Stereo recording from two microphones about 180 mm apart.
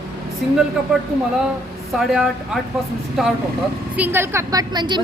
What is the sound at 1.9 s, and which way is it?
A woman's voice, centre (ahead or behind).